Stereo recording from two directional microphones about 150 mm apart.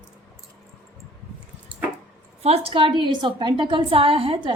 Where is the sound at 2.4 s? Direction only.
40° right (ahead or behind).